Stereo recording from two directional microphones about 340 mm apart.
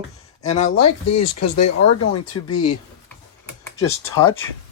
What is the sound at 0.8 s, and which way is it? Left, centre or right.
Speech, left.